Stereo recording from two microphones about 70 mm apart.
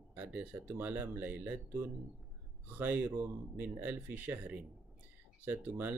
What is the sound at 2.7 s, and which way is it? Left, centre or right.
Speech, right.